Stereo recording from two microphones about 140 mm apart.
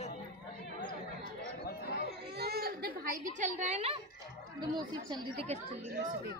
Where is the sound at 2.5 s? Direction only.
90° right; by 4.0 s 50° right (ahead or behind).